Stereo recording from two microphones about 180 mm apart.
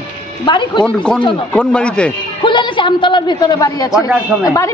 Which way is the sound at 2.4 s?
25° left (ahead or behind).